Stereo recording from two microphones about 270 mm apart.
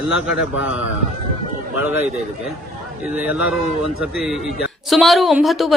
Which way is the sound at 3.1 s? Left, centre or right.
Centre.